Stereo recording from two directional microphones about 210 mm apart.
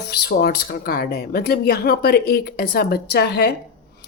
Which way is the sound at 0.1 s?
45° left (ahead or behind).